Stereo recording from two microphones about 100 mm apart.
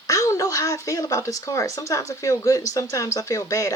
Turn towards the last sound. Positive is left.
turn(degrees=35)  # may be behind; listen again after turning